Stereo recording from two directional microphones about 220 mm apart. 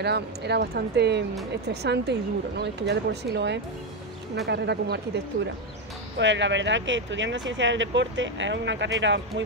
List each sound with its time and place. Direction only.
0.0 s speech: 50° right (ahead or behind)